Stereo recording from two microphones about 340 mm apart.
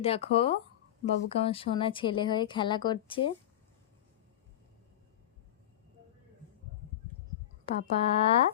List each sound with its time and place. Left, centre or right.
0.0 s speech: centre
7.6 s speech: centre